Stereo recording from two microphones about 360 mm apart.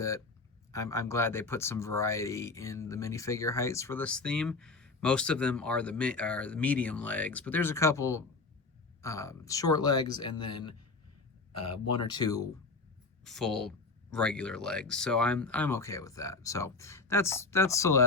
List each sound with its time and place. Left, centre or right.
0.7 s speech: centre
11.5 s speech: left
12.0 s speech: centre